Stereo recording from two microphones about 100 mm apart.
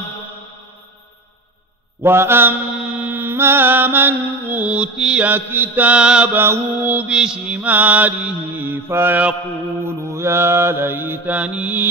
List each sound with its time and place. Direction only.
2.0 s mantra: 25° right (ahead or behind)
6.3 s mantra: 25° right (ahead or behind)